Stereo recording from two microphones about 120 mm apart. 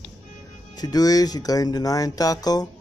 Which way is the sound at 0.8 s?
30° left (ahead or behind).